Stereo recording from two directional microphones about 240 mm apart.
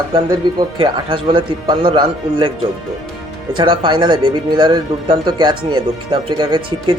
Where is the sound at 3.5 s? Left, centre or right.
Centre.